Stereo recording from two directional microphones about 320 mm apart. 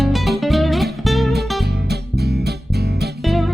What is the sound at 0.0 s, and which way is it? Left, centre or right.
Music, centre.